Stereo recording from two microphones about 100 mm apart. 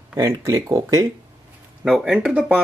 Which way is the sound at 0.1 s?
30° right (ahead or behind).